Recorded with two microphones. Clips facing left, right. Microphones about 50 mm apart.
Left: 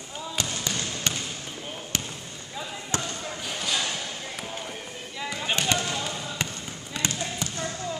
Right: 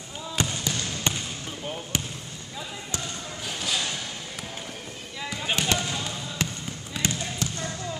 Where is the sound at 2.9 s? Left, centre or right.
Left.